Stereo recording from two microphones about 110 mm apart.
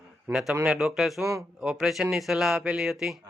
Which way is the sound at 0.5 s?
20° right (ahead or behind).